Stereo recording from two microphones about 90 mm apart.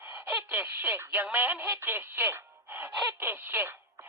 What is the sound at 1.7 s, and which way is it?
Speech, 25° right (ahead or behind).